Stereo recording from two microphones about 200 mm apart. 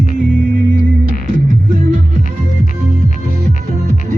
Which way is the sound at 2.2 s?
40° left (ahead or behind).